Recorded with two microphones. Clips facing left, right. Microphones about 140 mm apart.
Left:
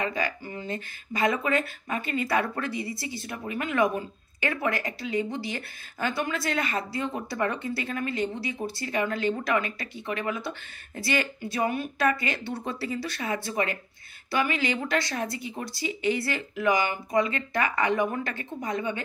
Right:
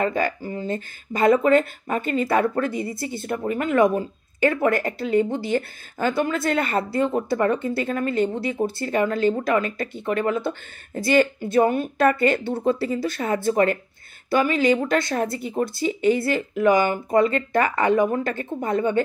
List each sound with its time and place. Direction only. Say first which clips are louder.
0.0 s a woman's voice: right 7 dB; 45° right (ahead or behind)
18.3 s a woman's voice: right 7 dB; 50° right (ahead or behind)